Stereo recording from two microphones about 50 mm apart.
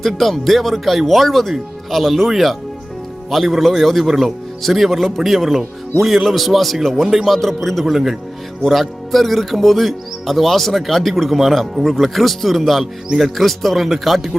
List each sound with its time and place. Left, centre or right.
0.0 s speech: centre